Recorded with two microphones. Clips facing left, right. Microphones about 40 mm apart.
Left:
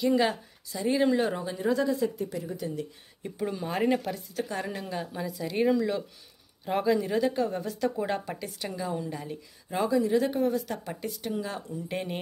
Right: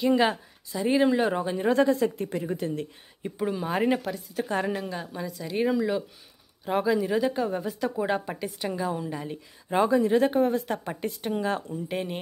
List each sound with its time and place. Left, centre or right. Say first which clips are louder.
0.0 s a woman's voice: right 2 dB; right
1.3 s a woman's voice: right 4 dB; right
1.7 s a woman's voice: right 4 dB; right
3.3 s speech: right 3 dB; centre
4.5 s a woman's voice: right 9 dB; right
4.8 s speech: even; centre
9.7 s speech: right 4 dB; right
11.9 s speech: right 2 dB; centre